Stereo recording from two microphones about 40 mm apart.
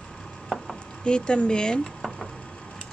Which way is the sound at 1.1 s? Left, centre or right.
Left.